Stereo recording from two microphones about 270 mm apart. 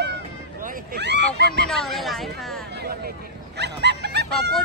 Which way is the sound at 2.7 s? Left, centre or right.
Right.